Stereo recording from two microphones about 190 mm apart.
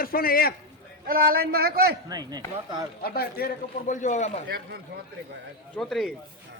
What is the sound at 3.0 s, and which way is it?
Speech, 55° left (ahead or behind).